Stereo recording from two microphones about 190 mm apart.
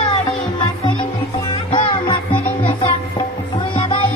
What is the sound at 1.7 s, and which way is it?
Music, 25° left (ahead or behind).